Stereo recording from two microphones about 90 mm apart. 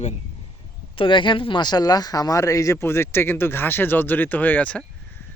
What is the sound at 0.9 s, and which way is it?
Speech, 70° left (ahead or behind).